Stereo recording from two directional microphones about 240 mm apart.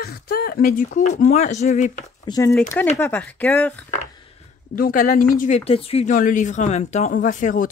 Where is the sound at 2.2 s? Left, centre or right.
Centre.